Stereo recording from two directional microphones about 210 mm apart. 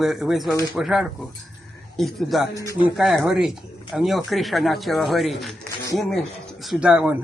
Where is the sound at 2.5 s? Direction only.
15° left (ahead or behind).